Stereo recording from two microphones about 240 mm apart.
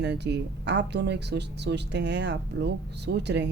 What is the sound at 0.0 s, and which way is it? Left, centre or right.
Speech, right.